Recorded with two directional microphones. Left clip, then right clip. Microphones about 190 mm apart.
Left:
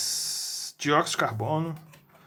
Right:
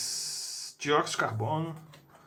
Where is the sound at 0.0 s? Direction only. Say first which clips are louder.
Left 5 dB; 30° left (ahead or behind).